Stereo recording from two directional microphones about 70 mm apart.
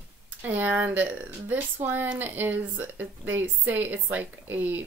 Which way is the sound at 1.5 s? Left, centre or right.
Right.